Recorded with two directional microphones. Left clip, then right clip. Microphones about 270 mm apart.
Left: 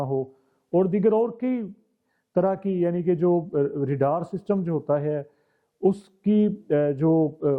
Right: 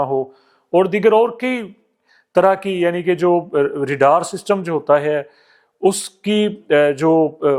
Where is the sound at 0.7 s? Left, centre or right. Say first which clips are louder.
Right 8 dB; centre.